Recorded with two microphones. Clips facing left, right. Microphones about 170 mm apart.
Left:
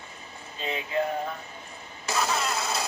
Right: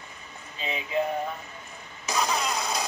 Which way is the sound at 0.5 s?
Centre (ahead or behind).